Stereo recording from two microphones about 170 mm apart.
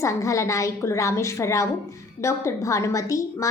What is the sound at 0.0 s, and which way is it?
A woman's voice, 20° left (ahead or behind).